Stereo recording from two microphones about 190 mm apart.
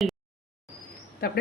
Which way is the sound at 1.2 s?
55° left (ahead or behind).